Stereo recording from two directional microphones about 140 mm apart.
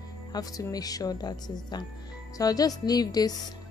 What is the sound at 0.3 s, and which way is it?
Speech, 25° left (ahead or behind).